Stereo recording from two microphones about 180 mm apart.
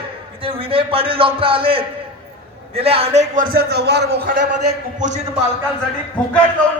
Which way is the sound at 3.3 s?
55° right (ahead or behind).